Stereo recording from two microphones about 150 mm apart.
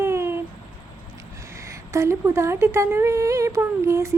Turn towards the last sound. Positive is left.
turn(degrees=-20)  # may be behind; listen again after turning